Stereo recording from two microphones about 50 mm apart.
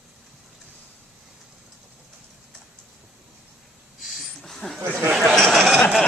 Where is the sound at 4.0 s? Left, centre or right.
Centre.